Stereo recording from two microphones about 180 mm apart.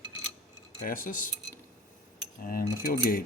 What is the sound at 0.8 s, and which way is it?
Speech, 50° left (ahead or behind).